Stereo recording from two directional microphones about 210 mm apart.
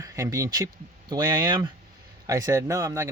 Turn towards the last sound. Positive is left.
turn(degrees=-15)  # may be behind; listen again after turning